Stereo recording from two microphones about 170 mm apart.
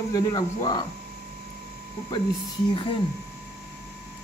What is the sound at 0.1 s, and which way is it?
Speech, 20° left (ahead or behind).